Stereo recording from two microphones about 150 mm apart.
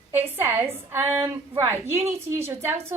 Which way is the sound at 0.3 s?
15° right (ahead or behind).